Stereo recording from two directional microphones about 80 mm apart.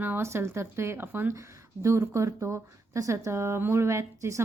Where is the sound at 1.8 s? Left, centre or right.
Right.